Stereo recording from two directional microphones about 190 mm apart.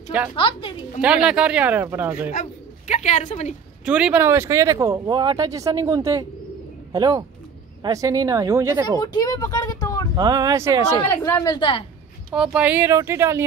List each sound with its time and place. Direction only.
0.4 s speech: 30° left (ahead or behind)
1.0 s speech: 5° right (ahead or behind)
2.9 s a woman's voice: 40° left (ahead or behind)
3.8 s speech: 5° right (ahead or behind)
8.8 s speech: 20° left (ahead or behind)
10.1 s speech: 20° right (ahead or behind)
11.2 s a woman's voice: 15° left (ahead or behind)
11.5 s speech: 25° left (ahead or behind)
12.4 s speech: 5° right (ahead or behind)